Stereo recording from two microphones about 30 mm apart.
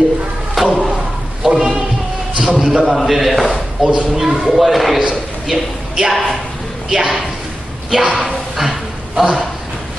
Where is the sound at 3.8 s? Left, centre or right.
Right.